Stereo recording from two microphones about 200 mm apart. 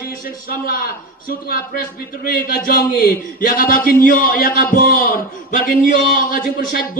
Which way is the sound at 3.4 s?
45° left (ahead or behind).